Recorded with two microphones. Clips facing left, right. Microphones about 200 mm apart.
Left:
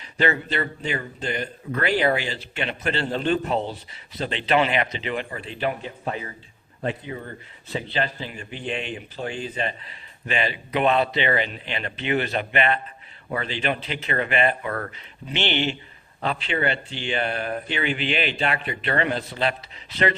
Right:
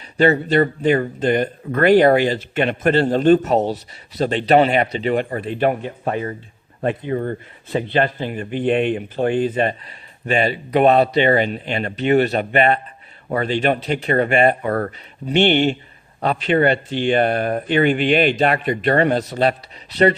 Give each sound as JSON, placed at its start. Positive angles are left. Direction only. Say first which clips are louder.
{"t": 0.0, "sound": "speech", "louder": "right 8 dB", "side_deg": -40}